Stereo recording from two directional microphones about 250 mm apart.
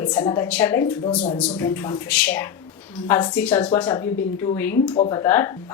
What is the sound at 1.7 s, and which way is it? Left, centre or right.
Speech, centre.